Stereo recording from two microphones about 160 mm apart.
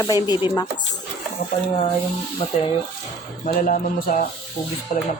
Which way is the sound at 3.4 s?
60° left (ahead or behind).